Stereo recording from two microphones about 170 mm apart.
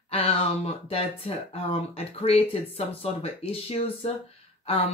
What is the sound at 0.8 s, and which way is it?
Speech, 35° left (ahead or behind).